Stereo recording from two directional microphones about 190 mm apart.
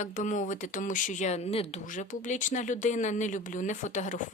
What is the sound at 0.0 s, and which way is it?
A woman's voice, 40° left (ahead or behind).